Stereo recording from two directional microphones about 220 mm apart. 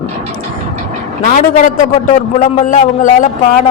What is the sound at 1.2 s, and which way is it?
Speech, 35° left (ahead or behind).